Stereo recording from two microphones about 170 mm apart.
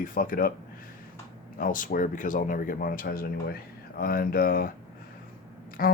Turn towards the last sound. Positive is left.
turn(degrees=60)  # may be behind; listen again after turning